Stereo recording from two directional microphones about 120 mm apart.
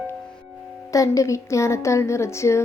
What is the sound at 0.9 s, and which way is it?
A woman's voice, 25° left (ahead or behind).